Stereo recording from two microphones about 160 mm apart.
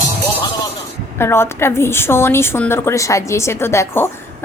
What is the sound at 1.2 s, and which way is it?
A woman's voice, 15° left (ahead or behind).